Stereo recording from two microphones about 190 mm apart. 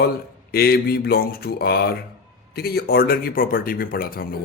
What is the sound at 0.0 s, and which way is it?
A man's voice, 55° left (ahead or behind).